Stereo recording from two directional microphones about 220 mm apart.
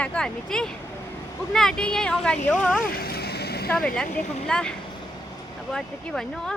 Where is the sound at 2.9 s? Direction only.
45° left (ahead or behind).